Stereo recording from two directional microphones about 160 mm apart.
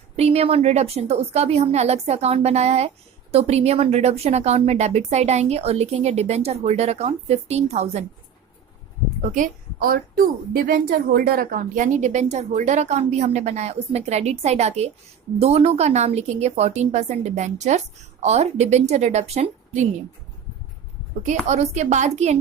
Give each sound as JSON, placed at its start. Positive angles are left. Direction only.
{"t": 0.2, "sound": "a woman's voice", "side_deg": -40}
{"t": 9.3, "sound": "a woman's voice", "side_deg": -60}
{"t": 21.4, "sound": "a woman's voice", "side_deg": -45}